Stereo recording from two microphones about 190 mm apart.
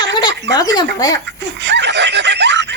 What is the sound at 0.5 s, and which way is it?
Speech, 20° left (ahead or behind).